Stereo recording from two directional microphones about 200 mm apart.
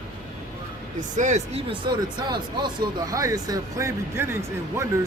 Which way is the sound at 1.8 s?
20° right (ahead or behind).